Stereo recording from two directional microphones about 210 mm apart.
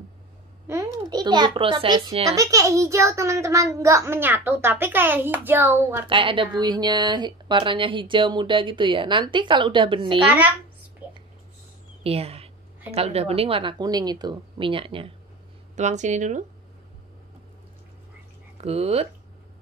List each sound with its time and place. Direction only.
0.7 s a sound: 15° right (ahead or behind)
1.1 s speech: 20° right (ahead or behind)
2.3 s a child's voice: 15° right (ahead or behind)
6.0 s speech: 25° right (ahead or behind)
10.2 s a child's voice: 5° right (ahead or behind)
11.0 s whispering: 10° right (ahead or behind)
12.0 s a woman's voice: 30° right (ahead or behind)
18.6 s speech: 30° right (ahead or behind)